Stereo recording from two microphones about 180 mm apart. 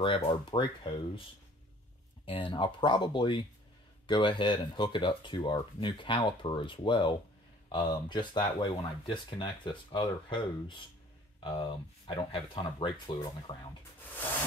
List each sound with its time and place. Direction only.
0.2 s speech: 25° left (ahead or behind)
2.2 s speech: 30° left (ahead or behind)
12.1 s speech: 25° left (ahead or behind)